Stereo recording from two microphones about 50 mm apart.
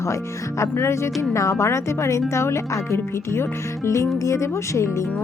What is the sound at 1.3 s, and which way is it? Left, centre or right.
Speech, left.